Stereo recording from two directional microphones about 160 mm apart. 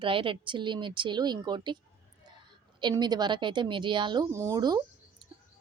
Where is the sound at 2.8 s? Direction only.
30° right (ahead or behind).